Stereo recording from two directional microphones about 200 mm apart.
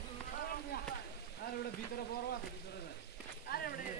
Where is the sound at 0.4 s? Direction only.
50° left (ahead or behind).